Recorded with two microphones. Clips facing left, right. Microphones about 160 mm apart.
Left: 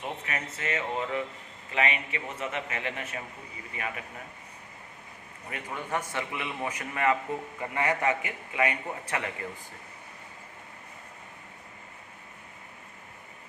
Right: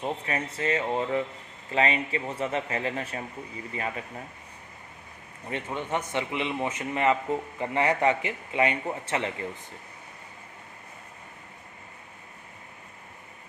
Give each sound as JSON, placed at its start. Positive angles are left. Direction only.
{"t": 0.0, "sound": "speech", "side_deg": -30}
{"t": 5.5, "sound": "a man's voice", "side_deg": -25}